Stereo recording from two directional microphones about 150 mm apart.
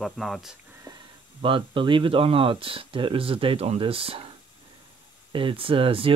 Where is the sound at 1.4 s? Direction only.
35° right (ahead or behind).